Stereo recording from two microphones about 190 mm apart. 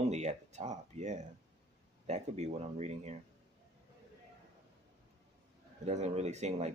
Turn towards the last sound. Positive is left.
turn(degrees=-35)  # may be behind; listen again after turning